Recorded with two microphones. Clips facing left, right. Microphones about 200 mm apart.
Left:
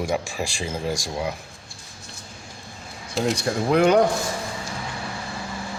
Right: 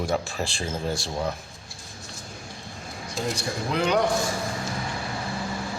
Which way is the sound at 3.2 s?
70° left (ahead or behind).